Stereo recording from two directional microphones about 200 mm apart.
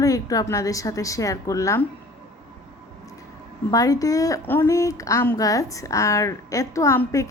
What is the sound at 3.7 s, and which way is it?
Speech, 15° left (ahead or behind).